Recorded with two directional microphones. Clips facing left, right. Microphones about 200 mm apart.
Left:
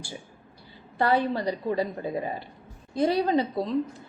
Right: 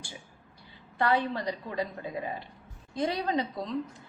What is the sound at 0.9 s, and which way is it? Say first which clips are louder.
Speech: left 4 dB; 35° left (ahead or behind).